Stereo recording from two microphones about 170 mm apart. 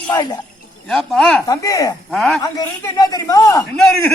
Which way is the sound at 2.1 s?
Centre (ahead or behind).